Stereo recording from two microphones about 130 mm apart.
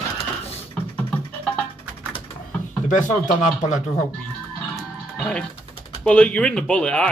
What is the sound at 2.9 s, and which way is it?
Speech, 75° left (ahead or behind).